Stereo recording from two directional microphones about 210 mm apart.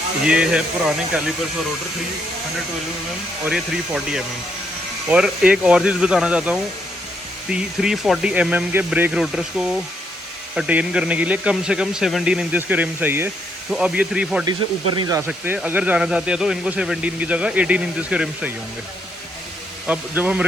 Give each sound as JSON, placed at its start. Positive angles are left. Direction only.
{"t": 0.3, "sound": "speech", "side_deg": -5}
{"t": 3.4, "sound": "speech", "side_deg": 0}
{"t": 14.9, "sound": "speech", "side_deg": -15}
{"t": 15.3, "sound": "speech", "side_deg": -5}
{"t": 19.9, "sound": "speech", "side_deg": -5}